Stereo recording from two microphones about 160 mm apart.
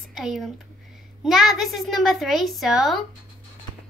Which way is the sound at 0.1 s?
Centre (ahead or behind).